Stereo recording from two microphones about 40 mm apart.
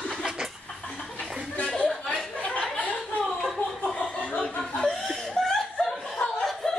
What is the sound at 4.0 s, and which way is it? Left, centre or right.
Chuckle, left.